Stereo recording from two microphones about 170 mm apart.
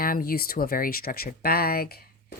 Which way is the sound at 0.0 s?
60° left (ahead or behind).